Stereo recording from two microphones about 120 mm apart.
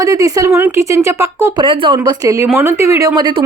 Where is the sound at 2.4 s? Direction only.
20° right (ahead or behind); by 3.4 s 35° right (ahead or behind).